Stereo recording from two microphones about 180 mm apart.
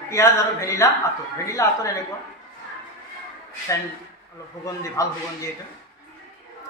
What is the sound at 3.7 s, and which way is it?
A man's voice, 20° left (ahead or behind).